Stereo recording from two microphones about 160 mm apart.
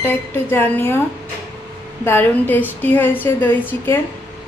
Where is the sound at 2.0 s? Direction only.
10° left (ahead or behind).